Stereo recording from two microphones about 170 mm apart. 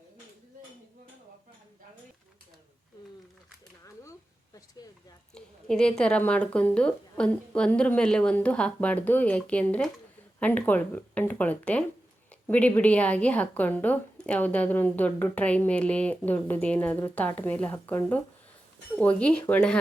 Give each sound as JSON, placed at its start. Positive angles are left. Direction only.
{"t": 4.8, "sound": "speech", "side_deg": 20}
{"t": 5.3, "sound": "a woman's voice", "side_deg": 5}